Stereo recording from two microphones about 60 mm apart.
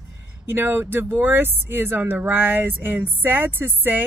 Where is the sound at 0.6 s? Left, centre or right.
Right.